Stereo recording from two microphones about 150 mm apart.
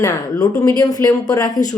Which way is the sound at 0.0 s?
20° left (ahead or behind).